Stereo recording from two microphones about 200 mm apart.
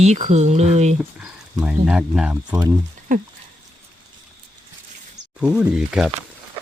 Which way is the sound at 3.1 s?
40° right (ahead or behind).